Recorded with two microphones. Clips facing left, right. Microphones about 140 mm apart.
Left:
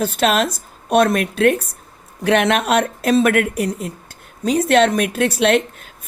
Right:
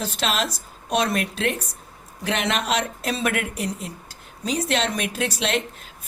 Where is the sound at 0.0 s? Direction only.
55° left (ahead or behind).